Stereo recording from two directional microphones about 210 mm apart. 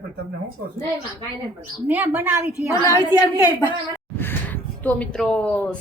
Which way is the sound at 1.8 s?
10° right (ahead or behind).